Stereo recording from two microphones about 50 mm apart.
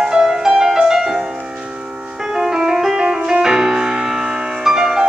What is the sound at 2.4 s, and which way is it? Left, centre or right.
Music, centre.